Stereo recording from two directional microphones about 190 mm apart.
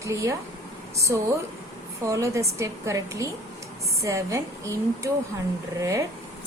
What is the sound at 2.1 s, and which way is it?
A woman's voice, 15° right (ahead or behind).